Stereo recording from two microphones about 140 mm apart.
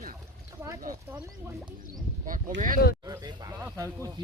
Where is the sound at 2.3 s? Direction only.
75° right (ahead or behind).